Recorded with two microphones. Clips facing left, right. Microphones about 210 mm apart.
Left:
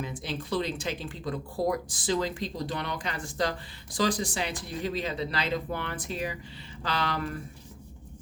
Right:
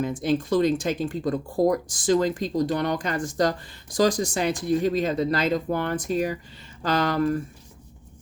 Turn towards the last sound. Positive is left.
turn(degrees=-40)  # may be behind; listen again after turning